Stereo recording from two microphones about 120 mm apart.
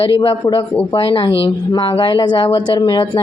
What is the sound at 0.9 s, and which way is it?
A woman's voice, 50° left (ahead or behind).